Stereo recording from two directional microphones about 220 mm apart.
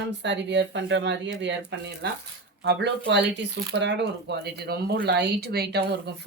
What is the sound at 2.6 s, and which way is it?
Speech, 50° right (ahead or behind).